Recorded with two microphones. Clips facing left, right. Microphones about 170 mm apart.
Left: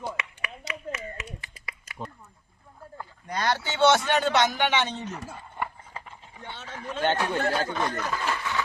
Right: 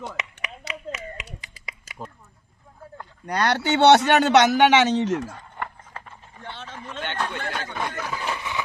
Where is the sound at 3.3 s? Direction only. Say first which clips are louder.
Right 6 dB; 70° right (ahead or behind); by 5.2 s 90° right.